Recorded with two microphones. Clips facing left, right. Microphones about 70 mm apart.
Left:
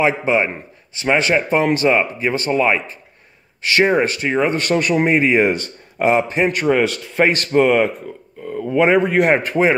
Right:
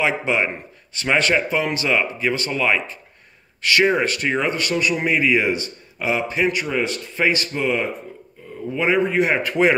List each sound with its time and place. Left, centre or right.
0.0 s speech: left
1.5 s speech: left; by 4.5 s centre
4.5 s speech: left
6.6 s a man's voice: left
8.8 s a man's voice: left
9.5 s speech: left